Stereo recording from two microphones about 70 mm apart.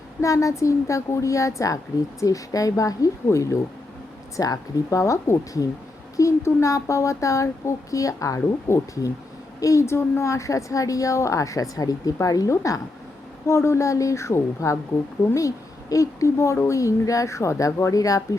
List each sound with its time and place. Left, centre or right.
0.2 s a woman's voice: left
13.5 s a woman's voice: left